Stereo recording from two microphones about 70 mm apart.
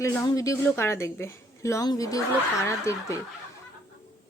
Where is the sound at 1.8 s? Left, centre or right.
Left.